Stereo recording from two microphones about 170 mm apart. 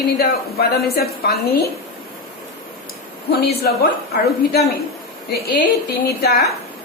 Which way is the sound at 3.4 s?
65° left (ahead or behind).